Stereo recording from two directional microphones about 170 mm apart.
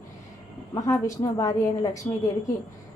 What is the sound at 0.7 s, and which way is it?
A woman's voice, 20° left (ahead or behind).